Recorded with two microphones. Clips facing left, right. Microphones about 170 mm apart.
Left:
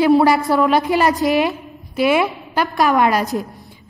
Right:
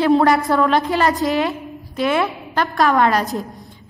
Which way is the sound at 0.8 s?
20° left (ahead or behind).